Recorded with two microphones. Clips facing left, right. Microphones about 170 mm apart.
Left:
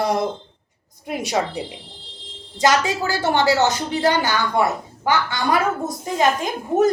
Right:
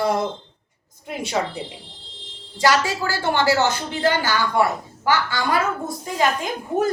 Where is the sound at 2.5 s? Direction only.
20° left (ahead or behind).